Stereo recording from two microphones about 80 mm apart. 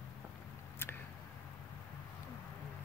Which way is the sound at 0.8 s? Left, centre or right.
Left.